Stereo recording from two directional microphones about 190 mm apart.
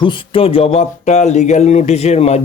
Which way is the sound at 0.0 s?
25° left (ahead or behind).